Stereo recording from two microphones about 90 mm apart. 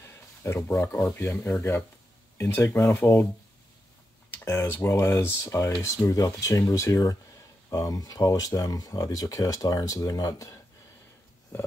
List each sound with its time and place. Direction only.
0.0 s a sound: 30° left (ahead or behind)
0.9 s speech: 25° left (ahead or behind)
4.3 s speech: 25° left (ahead or behind)
5.6 s speech: 40° left (ahead or behind)